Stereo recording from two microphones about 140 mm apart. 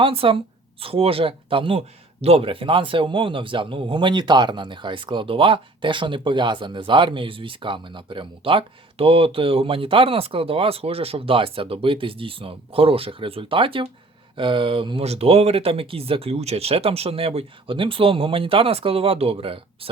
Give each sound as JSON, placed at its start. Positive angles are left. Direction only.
{"t": 0.0, "sound": "a man's voice", "side_deg": -40}